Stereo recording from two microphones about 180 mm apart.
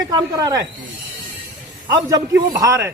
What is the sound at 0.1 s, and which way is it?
Speech, 20° right (ahead or behind).